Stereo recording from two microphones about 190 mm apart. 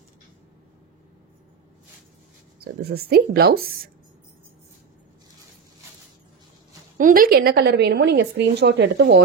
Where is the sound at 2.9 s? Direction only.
55° right (ahead or behind).